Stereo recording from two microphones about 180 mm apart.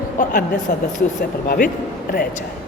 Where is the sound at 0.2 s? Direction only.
45° left (ahead or behind).